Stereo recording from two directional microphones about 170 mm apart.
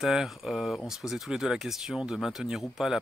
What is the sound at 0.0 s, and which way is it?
Speech, centre (ahead or behind).